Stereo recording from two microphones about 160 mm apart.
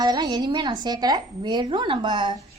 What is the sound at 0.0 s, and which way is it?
A woman's voice, 25° right (ahead or behind).